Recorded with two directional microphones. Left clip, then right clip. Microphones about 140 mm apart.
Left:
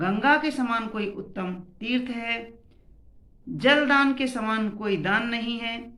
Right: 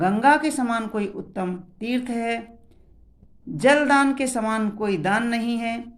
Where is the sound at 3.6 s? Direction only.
35° right (ahead or behind).